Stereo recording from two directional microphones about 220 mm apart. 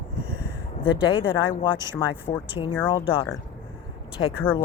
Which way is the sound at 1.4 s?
20° left (ahead or behind).